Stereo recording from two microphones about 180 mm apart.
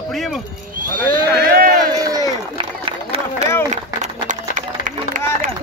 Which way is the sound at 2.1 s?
20° right (ahead or behind).